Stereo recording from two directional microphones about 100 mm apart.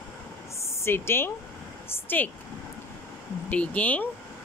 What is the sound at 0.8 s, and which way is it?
A woman's voice, 25° left (ahead or behind).